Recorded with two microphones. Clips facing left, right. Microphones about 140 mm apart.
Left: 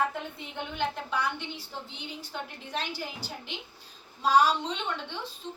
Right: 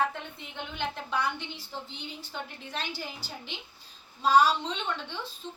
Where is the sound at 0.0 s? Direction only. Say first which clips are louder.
Even; 10° left (ahead or behind).